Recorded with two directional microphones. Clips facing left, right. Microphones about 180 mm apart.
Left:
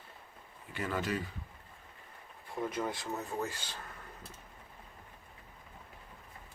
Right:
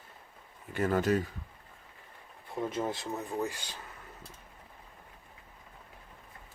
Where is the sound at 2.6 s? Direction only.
25° right (ahead or behind).